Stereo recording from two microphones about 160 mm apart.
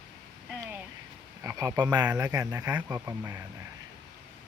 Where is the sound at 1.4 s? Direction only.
25° right (ahead or behind).